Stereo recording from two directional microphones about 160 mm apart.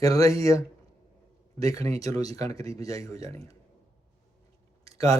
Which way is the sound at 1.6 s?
20° left (ahead or behind).